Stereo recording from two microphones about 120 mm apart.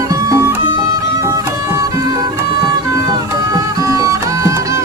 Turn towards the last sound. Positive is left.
turn(degrees=-25)  # may be behind; listen again after turning